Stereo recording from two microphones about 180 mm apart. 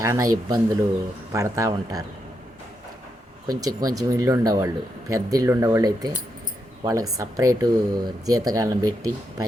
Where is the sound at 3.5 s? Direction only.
20° right (ahead or behind).